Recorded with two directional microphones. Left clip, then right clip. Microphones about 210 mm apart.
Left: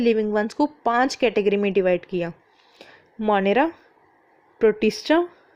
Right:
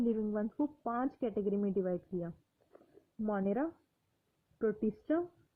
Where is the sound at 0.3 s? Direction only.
20° left (ahead or behind).